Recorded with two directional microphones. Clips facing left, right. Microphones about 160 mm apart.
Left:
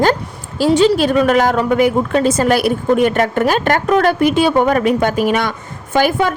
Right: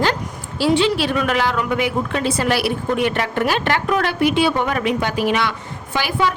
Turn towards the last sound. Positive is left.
turn(degrees=50)  # may be behind; listen again after turning